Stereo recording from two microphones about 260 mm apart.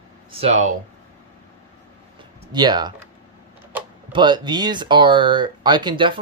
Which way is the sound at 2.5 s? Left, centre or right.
Centre.